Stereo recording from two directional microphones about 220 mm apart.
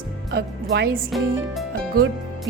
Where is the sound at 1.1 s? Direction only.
Centre (ahead or behind).